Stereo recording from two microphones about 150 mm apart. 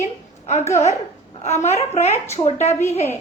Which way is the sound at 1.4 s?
45° left (ahead or behind).